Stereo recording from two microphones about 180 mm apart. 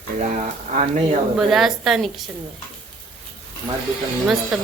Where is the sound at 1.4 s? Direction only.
Centre (ahead or behind).